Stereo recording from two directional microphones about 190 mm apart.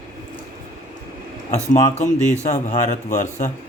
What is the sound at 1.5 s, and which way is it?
Speech, 40° left (ahead or behind).